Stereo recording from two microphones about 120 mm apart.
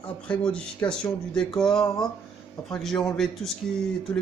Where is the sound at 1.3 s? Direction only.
5° left (ahead or behind).